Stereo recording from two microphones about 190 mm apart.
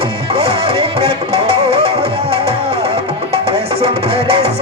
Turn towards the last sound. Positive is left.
turn(degrees=-30)  # may be behind; listen again after turning